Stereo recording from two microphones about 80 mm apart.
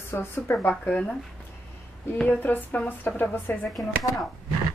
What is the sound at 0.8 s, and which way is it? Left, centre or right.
Speech, centre.